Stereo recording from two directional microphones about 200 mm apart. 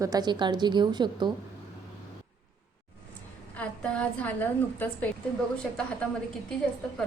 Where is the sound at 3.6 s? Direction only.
5° left (ahead or behind).